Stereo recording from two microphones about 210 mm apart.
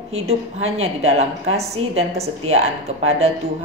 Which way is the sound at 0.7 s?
30° right (ahead or behind).